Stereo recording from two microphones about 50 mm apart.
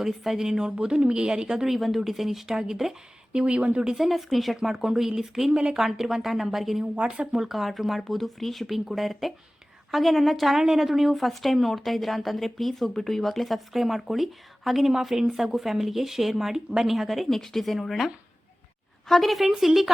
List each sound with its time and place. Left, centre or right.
0.0 s a woman's voice: centre
3.3 s speech: right
3.9 s a woman's voice: centre
6.9 s speech: right
7.3 s a woman's voice: centre